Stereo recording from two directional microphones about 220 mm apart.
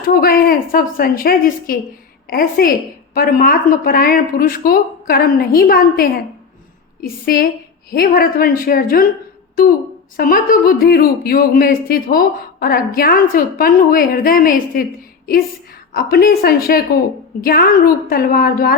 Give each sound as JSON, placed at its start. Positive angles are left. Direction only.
{"t": 0.0, "sound": "speech", "side_deg": 40}
{"t": 10.2, "sound": "speech", "side_deg": 40}
{"t": 15.9, "sound": "a woman's voice", "side_deg": 45}